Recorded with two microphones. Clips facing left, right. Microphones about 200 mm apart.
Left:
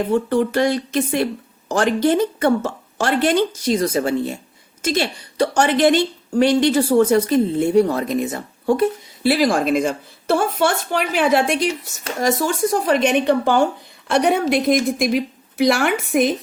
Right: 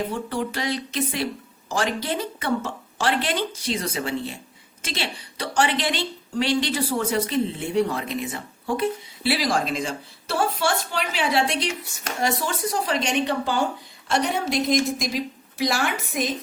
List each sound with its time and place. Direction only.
0.1 s a woman's voice: 50° left (ahead or behind)
11.7 s a woman's voice: 40° left (ahead or behind); by 16.3 s 55° left (ahead or behind)